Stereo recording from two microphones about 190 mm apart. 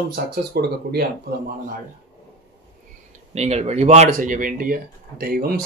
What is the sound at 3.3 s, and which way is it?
Speech, 35° right (ahead or behind).